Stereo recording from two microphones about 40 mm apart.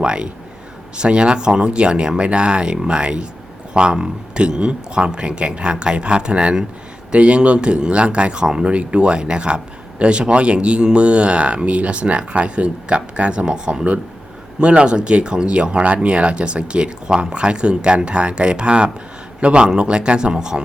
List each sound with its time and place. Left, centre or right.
0.0 s a man's voice: right